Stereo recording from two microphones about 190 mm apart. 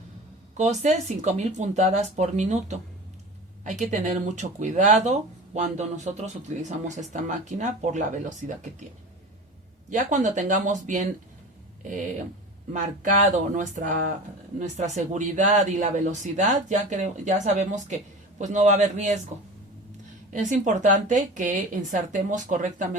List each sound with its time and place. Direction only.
0.5 s speech: 40° right (ahead or behind)
9.9 s speech: 40° right (ahead or behind)
13.5 s speech: 40° right (ahead or behind)
20.3 s speech: 40° right (ahead or behind)